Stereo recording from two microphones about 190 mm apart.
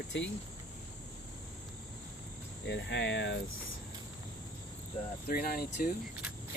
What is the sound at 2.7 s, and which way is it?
Speech, 65° left (ahead or behind).